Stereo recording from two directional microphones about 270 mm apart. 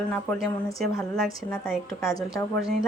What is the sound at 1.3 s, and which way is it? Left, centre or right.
Speech, centre.